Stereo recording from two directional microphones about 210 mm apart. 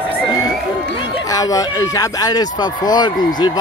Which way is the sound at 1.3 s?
15° left (ahead or behind).